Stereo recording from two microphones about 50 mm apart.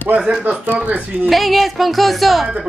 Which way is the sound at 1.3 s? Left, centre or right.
Centre.